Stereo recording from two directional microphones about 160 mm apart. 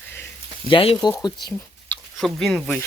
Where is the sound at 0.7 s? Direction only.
35° left (ahead or behind).